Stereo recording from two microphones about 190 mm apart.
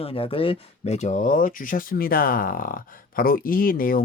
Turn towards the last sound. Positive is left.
turn(degrees=50)  # may be behind; listen again after turning